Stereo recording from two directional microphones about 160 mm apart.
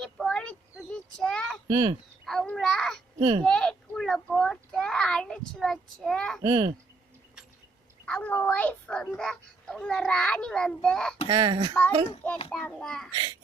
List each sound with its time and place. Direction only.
0.0 s a sound: centre (ahead or behind)
1.6 s speech: 30° right (ahead or behind)
2.2 s babbling: centre (ahead or behind)
3.2 s speech: 30° right (ahead or behind)
3.4 s a sound: 5° left (ahead or behind)
6.4 s speech: 25° right (ahead or behind)
8.0 s a sound: 10° left (ahead or behind)
11.3 s speech: 30° right (ahead or behind)
12.5 s a child's voice: 5° left (ahead or behind)